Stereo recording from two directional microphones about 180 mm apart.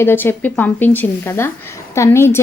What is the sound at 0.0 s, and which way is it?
A woman's voice, 10° left (ahead or behind).